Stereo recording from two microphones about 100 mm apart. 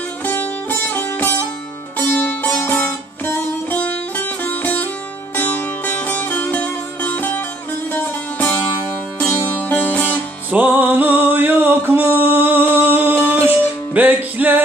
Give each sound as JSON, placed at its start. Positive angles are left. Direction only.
{"t": 0.3, "sound": "music", "side_deg": 15}
{"t": 10.5, "sound": "music", "side_deg": -15}